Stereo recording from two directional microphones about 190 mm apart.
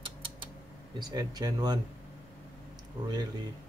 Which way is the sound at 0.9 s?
20° right (ahead or behind).